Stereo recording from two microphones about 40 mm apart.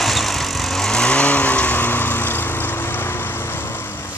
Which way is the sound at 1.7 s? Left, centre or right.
Left.